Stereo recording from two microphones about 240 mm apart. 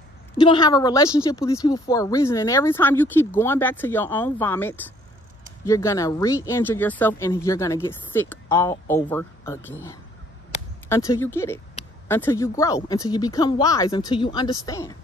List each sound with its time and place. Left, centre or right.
0.4 s a woman's voice: centre